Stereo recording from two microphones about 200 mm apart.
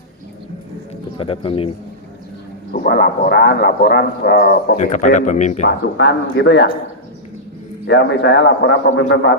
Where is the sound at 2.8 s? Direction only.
55° left (ahead or behind); by 5.6 s 35° left (ahead or behind).